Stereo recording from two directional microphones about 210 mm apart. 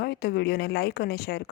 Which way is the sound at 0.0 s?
50° left (ahead or behind).